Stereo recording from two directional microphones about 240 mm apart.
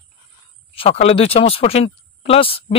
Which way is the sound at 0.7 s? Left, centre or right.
Left.